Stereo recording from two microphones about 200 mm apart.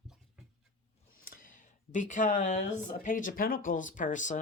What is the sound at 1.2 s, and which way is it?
Speech, 45° left (ahead or behind).